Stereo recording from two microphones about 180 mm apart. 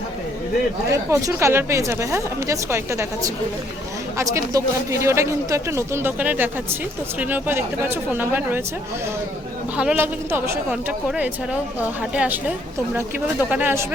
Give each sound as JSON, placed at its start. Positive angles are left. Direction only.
{"t": 0.9, "sound": "speech", "side_deg": -15}
{"t": 9.7, "sound": "speech", "side_deg": -10}
{"t": 11.8, "sound": "speech", "side_deg": -10}